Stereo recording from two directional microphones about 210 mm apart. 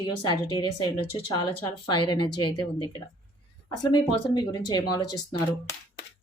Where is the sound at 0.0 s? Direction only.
20° left (ahead or behind).